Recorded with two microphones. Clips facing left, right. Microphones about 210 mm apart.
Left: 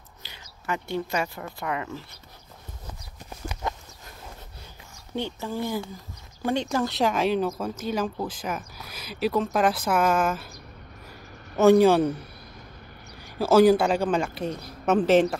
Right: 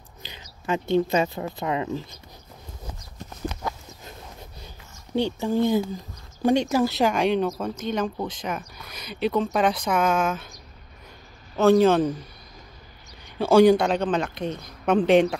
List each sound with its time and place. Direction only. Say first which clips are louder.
0.2 s speech: right 5 dB; 20° right (ahead or behind)
5.1 s speech: right 7 dB; 15° right (ahead or behind); by 10.5 s 5° left (ahead or behind)
11.6 s a man's voice: left 1 dB; 10° left (ahead or behind)
13.4 s speech: right 1 dB; 5° left (ahead or behind)